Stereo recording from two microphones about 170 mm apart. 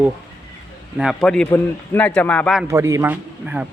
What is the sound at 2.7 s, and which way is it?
Speech, 15° right (ahead or behind).